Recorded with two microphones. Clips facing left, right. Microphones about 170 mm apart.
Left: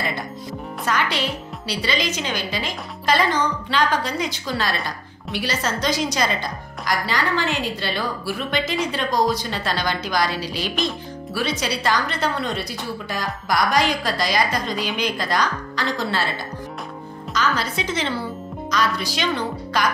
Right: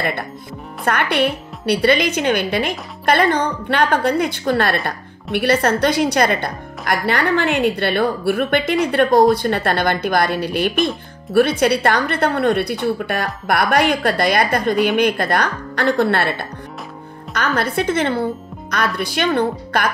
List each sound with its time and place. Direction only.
0.8 s a woman's voice: 60° right (ahead or behind)